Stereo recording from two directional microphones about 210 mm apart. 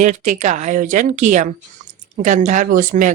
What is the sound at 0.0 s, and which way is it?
A woman's voice, 35° right (ahead or behind).